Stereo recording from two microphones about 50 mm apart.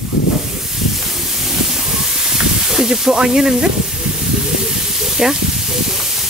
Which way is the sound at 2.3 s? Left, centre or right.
Centre.